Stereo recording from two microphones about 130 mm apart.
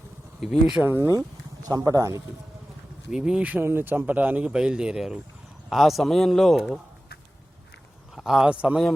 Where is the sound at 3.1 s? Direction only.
5° right (ahead or behind).